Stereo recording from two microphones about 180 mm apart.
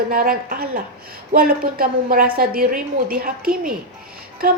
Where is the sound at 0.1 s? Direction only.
55° right (ahead or behind).